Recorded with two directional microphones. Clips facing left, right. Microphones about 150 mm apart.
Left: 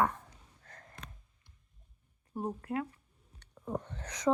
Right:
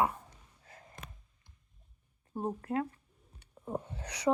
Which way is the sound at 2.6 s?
30° right (ahead or behind).